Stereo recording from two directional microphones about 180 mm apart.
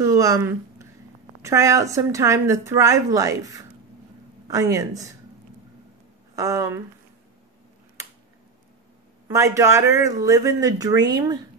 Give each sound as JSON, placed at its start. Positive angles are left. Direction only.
{"t": 0.0, "sound": "a woman's voice", "side_deg": -20}
{"t": 6.3, "sound": "speech", "side_deg": -20}
{"t": 9.3, "sound": "speech", "side_deg": -20}